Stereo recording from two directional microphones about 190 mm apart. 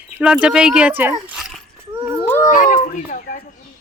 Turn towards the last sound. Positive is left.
turn(degrees=45)  # may be behind; listen again after turning